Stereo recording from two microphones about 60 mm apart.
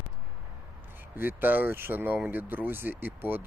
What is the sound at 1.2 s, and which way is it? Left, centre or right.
Speech, right.